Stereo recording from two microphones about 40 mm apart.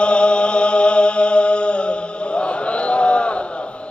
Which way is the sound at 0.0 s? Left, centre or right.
Left.